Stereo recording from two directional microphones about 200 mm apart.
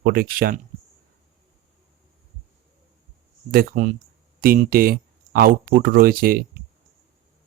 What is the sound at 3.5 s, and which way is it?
Speech, 45° right (ahead or behind).